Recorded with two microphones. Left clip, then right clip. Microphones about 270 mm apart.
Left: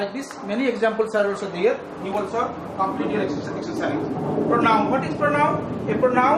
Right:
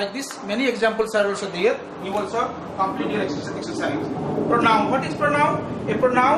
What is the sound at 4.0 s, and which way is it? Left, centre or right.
Vehicle, left.